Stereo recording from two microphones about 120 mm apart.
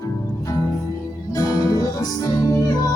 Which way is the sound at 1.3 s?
30° left (ahead or behind).